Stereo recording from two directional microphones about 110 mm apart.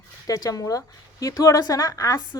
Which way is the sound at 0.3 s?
30° left (ahead or behind).